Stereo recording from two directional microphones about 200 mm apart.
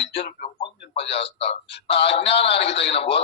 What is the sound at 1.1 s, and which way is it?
Speech, 30° left (ahead or behind).